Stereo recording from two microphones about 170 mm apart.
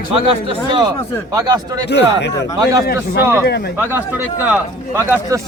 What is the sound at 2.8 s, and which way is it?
Speech, 70° left (ahead or behind).